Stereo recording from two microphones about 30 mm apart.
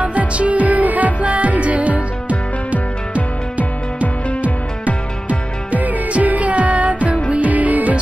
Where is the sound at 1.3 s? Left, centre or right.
Right.